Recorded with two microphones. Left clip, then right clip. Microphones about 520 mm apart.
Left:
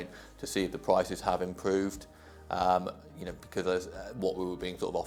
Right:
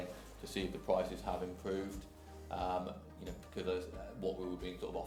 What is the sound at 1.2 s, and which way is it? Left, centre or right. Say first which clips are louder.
Speech: left 10 dB; left.